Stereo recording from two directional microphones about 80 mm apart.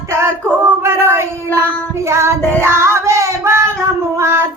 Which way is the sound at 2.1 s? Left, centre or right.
Right.